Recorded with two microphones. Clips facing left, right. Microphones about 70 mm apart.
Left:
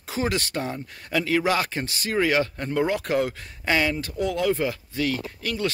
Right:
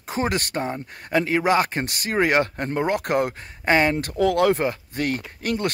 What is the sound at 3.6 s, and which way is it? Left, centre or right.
Speech, right.